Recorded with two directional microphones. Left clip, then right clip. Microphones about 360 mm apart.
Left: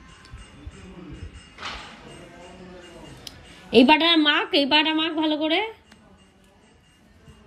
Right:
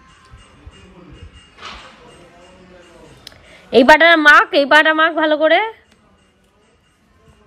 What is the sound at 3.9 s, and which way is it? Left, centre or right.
A woman's voice, centre.